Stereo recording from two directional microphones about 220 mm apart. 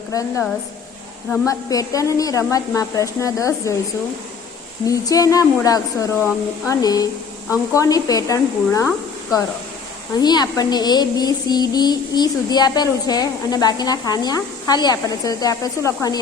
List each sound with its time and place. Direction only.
0.1 s speech: 15° left (ahead or behind)
1.5 s speech: 15° left (ahead or behind)
4.9 s speech: 15° left (ahead or behind)
10.2 s speech: 20° left (ahead or behind)